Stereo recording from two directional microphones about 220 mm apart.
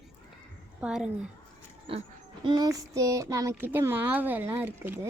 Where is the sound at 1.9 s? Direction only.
25° right (ahead or behind).